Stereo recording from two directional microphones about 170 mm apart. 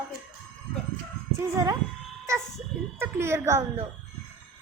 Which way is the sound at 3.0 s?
15° right (ahead or behind).